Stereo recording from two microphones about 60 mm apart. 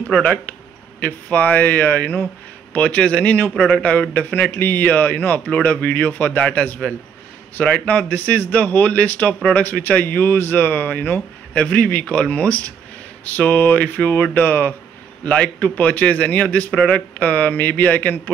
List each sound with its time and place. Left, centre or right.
0.1 s a man's voice: centre
15.2 s a man's voice: centre